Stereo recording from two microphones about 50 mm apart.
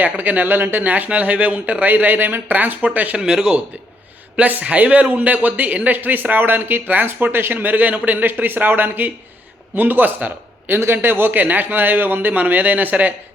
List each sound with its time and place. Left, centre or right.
0.0 s speech: right
3.2 s a man's voice: centre
4.4 s a man's voice: right
10.8 s speech: right